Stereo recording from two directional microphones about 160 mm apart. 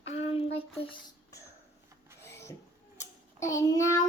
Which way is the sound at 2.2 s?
15° left (ahead or behind).